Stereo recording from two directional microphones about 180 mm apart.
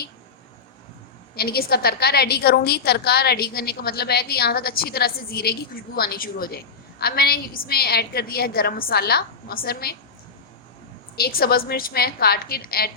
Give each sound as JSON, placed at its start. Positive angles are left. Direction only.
{"t": 1.4, "sound": "a woman's voice", "side_deg": 60}
{"t": 11.2, "sound": "a woman's voice", "side_deg": 60}